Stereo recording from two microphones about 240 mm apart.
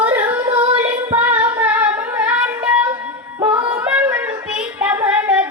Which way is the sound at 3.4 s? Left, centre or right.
Centre.